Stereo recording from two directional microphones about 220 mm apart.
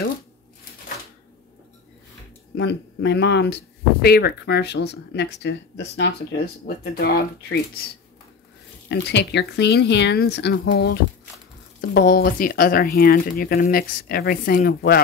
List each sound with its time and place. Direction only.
2.5 s speech: 50° left (ahead or behind)
8.8 s speech: 50° left (ahead or behind)